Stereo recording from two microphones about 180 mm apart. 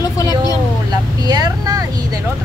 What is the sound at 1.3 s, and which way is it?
Speech, 20° right (ahead or behind).